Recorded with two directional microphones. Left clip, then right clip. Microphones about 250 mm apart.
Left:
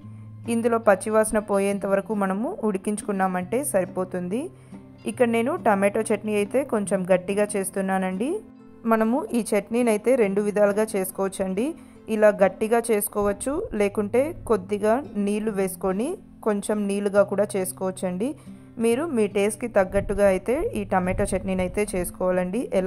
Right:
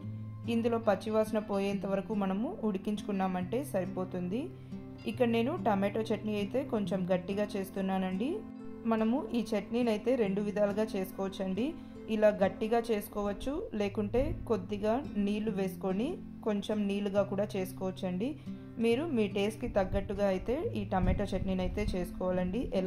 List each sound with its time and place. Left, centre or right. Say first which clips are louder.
0.5 s a woman's voice: left 10 dB; left